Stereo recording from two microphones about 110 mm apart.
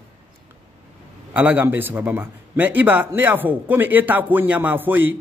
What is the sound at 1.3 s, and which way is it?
A man's voice, 15° right (ahead or behind).